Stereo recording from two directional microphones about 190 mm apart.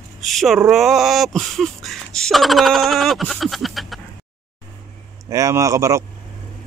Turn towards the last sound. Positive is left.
turn(degrees=-15)  # may be behind; listen again after turning